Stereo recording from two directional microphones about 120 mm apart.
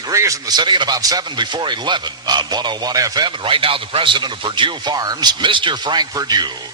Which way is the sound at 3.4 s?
50° right (ahead or behind).